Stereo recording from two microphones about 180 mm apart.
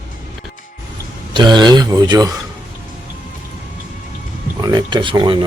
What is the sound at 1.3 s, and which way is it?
Speech, 25° right (ahead or behind).